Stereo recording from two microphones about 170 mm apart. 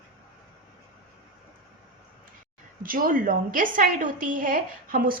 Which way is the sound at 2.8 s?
55° right (ahead or behind).